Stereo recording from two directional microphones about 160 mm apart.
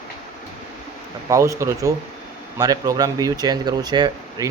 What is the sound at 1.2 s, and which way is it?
Speech, 20° right (ahead or behind).